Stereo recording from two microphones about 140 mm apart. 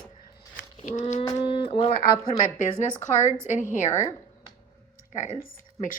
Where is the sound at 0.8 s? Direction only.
65° left (ahead or behind).